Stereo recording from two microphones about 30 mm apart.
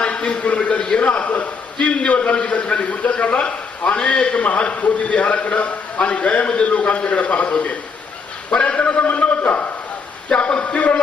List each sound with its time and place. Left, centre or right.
0.0 s a sound: left
2.4 s a man's voice: left
8.5 s a man's voice: left
10.2 s a man's voice: left